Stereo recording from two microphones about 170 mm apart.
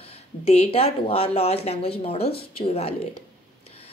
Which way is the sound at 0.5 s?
35° left (ahead or behind).